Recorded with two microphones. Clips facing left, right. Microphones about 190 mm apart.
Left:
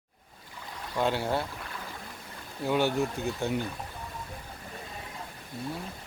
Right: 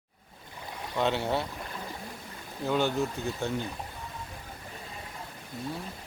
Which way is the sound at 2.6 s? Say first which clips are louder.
Left 1 dB; 15° left (ahead or behind).